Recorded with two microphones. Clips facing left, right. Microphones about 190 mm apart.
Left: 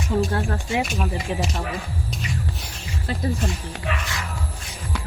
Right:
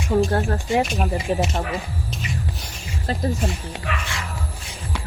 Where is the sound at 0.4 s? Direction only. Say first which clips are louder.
Right 4 dB; 40° right (ahead or behind).